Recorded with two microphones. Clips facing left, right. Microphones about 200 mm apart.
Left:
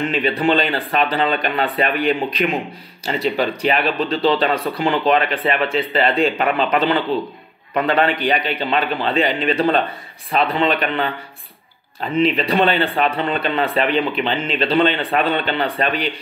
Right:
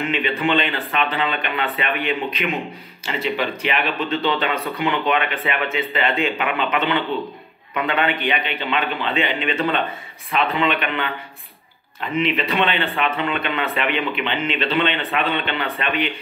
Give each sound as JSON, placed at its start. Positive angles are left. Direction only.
{"t": 0.0, "sound": "speech", "side_deg": 35}